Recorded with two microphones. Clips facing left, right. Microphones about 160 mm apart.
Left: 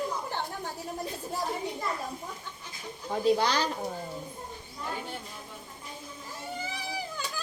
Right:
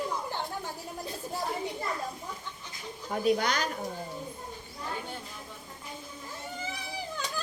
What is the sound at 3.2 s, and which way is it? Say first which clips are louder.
Speech: left 2 dB; 30° left (ahead or behind).